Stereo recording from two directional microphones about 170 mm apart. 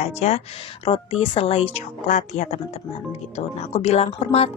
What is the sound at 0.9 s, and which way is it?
Speech, 30° left (ahead or behind).